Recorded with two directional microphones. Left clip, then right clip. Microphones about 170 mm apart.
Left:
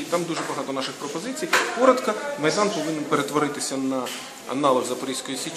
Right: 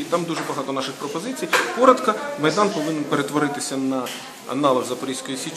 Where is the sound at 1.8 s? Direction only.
Centre (ahead or behind).